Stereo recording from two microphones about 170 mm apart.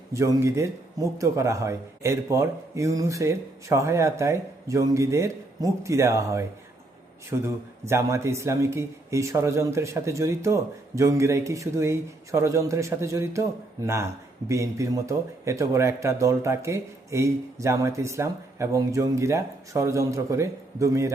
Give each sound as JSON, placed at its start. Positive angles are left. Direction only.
{"t": 0.1, "sound": "speech", "side_deg": -20}